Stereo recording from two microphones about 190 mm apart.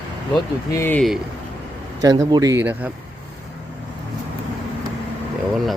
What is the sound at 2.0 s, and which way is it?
Speech, 20° right (ahead or behind).